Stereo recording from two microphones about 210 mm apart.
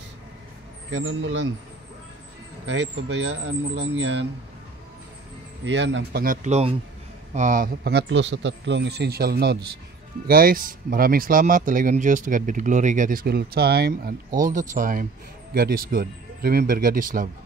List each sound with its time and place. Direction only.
0.9 s speech: 60° right (ahead or behind)
2.7 s speech: 55° right (ahead or behind)
5.7 s speech: 60° right (ahead or behind)
6.2 s speech: 35° right (ahead or behind)